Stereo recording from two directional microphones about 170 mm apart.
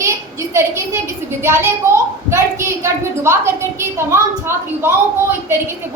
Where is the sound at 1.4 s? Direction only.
15° right (ahead or behind).